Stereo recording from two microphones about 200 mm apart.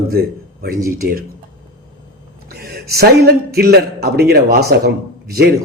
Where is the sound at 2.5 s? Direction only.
50° right (ahead or behind).